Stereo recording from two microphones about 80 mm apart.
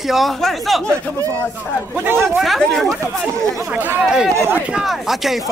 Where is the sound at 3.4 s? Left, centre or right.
Right.